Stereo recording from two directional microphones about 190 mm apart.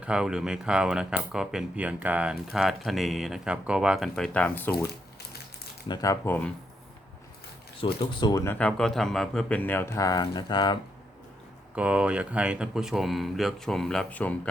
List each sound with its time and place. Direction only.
0.0 s speech: 5° right (ahead or behind)
5.9 s speech: 20° left (ahead or behind)
7.8 s speech: 25° left (ahead or behind)
8.5 s speech: 5° left (ahead or behind); by 10.8 s 25° left (ahead or behind)
11.7 s speech: 5° right (ahead or behind)